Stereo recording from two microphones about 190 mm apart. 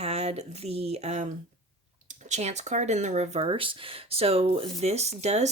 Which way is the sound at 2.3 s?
35° right (ahead or behind).